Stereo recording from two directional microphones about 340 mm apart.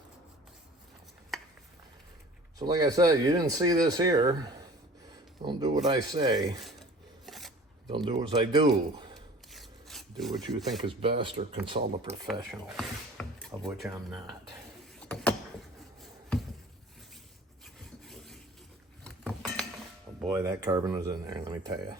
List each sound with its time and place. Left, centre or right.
1.3 s a sound: centre
2.6 s speech: centre
7.3 s filing: centre
7.9 s speech: centre
9.5 s rub: centre
10.8 s speech: centre
12.3 s speech: centre
15.0 s a sound: centre
18.0 s wood: centre
19.0 s dishes: centre
20.2 s speech: centre